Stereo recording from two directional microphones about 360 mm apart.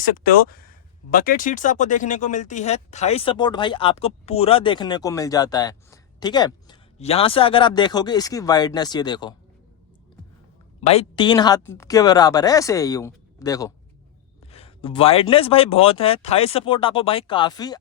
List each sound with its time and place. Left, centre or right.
0.2 s speech: left
10.8 s speech: centre